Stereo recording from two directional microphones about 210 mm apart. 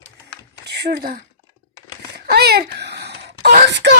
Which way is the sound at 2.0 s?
50° right (ahead or behind).